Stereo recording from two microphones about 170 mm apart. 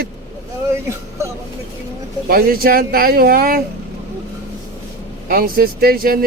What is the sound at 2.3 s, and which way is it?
A man's voice, 60° right (ahead or behind).